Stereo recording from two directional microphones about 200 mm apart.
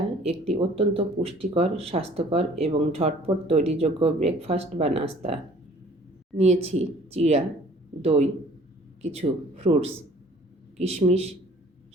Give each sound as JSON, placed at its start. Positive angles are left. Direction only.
{"t": 0.2, "sound": "speech", "side_deg": -30}
{"t": 9.6, "sound": "speech", "side_deg": -35}